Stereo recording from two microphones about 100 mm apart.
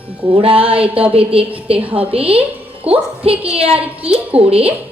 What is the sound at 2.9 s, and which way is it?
A woman's voice, 80° right.